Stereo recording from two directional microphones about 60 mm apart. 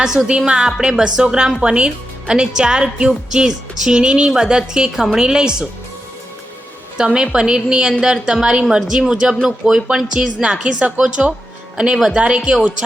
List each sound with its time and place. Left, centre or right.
0.0 s speech: centre
6.9 s speech: centre
9.3 s speech: centre